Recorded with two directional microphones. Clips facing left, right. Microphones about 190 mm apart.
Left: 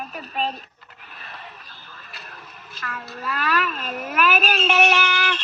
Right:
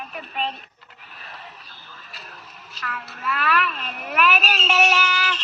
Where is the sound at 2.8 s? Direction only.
40° left (ahead or behind); by 4.9 s 60° left (ahead or behind).